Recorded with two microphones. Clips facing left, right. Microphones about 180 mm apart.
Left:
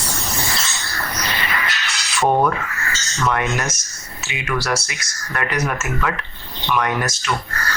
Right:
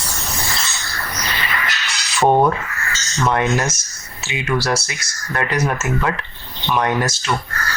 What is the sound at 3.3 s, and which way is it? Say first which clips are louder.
Speech: right 4 dB; 30° right (ahead or behind).